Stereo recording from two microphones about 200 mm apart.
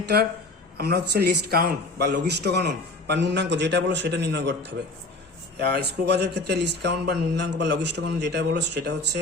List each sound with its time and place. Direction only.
0.8 s a man's voice: 55° right (ahead or behind)